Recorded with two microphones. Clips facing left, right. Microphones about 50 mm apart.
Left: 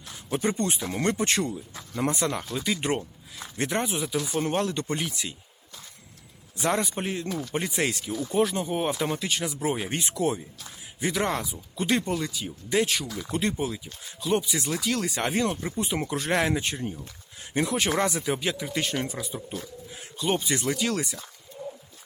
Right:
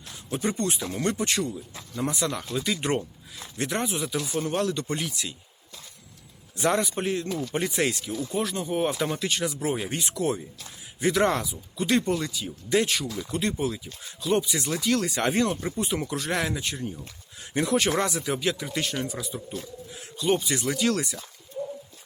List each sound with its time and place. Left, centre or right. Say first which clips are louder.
0.4 s speech: even; centre
1.1 s speech: left 1 dB; left; by 4.3 s centre
4.3 s speech: right 1 dB; left
6.7 s speech: right 2 dB; centre
8.2 s speech: left 5 dB; centre
11.5 s speech: right 1 dB; centre
13.3 s speech: even; centre
16.0 s speech: left 2 dB; centre
17.6 s speech: right 1 dB; centre
21.5 s bird: right 4 dB; centre